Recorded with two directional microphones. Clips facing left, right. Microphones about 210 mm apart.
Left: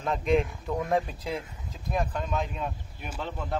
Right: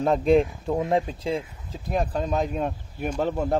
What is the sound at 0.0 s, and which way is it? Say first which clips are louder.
Speech: right 6 dB; 35° right (ahead or behind).